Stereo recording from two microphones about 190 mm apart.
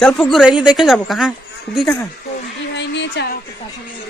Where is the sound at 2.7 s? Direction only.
65° left (ahead or behind).